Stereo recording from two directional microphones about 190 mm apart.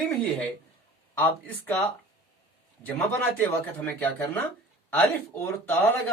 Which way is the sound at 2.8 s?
10° left (ahead or behind).